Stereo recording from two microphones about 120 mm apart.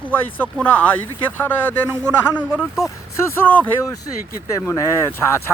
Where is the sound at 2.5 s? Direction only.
5° right (ahead or behind).